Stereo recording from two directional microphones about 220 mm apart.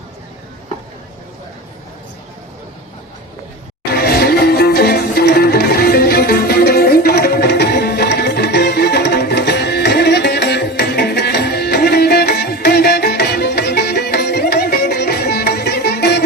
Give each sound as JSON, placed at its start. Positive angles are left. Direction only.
{"t": 3.9, "sound": "music", "side_deg": 45}